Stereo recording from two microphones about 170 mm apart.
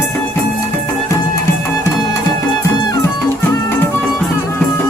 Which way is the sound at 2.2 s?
20° left (ahead or behind).